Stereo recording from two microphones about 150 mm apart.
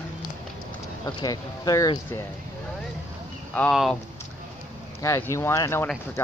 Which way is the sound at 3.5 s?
10° left (ahead or behind).